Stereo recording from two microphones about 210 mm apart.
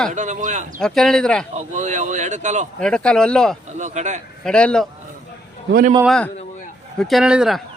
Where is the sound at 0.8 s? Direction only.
Centre (ahead or behind).